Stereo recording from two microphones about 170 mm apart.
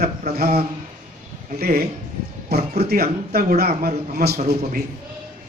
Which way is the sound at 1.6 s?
60° right (ahead or behind).